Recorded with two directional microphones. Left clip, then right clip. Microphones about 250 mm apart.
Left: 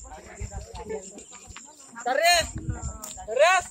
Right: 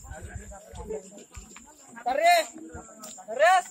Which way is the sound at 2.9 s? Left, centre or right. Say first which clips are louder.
Left 4 dB; left.